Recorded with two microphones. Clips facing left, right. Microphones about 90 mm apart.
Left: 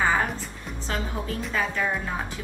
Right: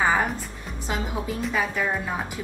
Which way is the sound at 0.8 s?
15° right (ahead or behind).